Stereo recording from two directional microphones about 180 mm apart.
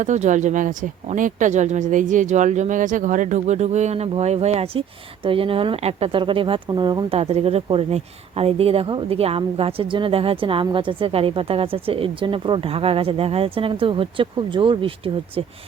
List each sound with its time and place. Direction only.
0.0 s speech: 40° right (ahead or behind)